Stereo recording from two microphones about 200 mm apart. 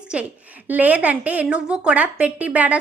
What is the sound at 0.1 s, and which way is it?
A woman's voice, 5° right (ahead or behind).